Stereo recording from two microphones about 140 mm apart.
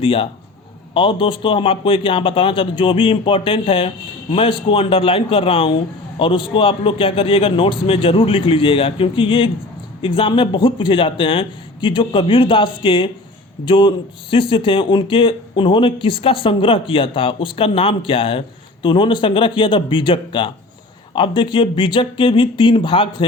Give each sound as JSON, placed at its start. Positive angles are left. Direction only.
{"t": 0.0, "sound": "speech", "side_deg": 40}